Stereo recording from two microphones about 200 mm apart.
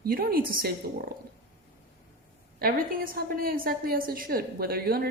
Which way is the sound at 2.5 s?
45° right (ahead or behind).